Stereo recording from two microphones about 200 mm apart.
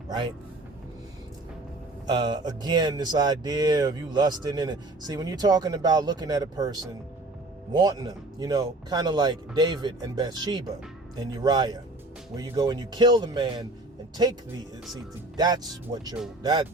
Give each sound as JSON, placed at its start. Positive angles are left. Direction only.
{"t": 2.0, "sound": "speech", "side_deg": -20}
{"t": 15.4, "sound": "speech", "side_deg": -20}